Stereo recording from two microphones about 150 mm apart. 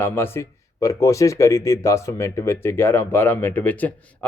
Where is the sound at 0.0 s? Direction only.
15° left (ahead or behind).